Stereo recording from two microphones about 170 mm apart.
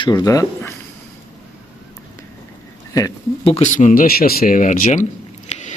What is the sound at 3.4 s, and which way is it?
Speech, 40° left (ahead or behind).